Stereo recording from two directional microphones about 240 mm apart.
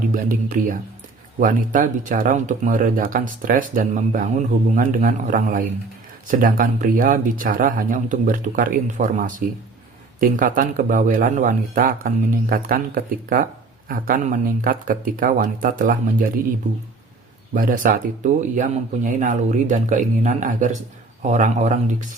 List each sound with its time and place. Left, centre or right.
0.1 s speech: right
17.5 s speech: right